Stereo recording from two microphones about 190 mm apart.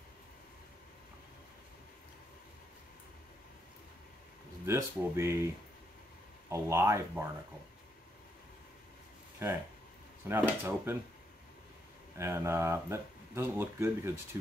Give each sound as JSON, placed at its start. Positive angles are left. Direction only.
{"t": 4.6, "sound": "speech", "side_deg": -15}
{"t": 6.5, "sound": "speech", "side_deg": -15}
{"t": 9.4, "sound": "speech", "side_deg": -10}
{"t": 12.2, "sound": "speech", "side_deg": -15}